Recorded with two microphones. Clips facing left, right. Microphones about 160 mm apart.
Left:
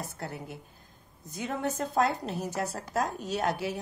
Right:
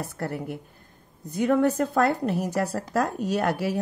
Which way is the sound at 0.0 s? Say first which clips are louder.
Right 7 dB; 60° right (ahead or behind).